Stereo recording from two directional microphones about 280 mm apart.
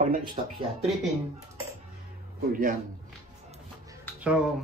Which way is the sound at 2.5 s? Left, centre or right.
Right.